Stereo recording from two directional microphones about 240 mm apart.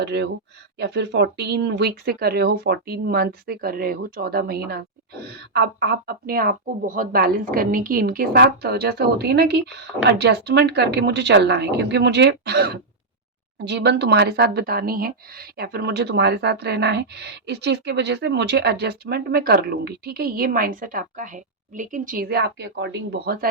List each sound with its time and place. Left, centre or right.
0.0 s speech: right